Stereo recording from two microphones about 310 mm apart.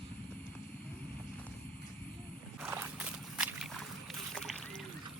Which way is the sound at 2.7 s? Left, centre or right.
Centre.